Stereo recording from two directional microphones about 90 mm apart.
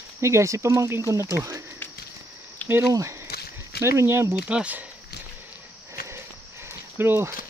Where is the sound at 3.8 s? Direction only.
30° right (ahead or behind).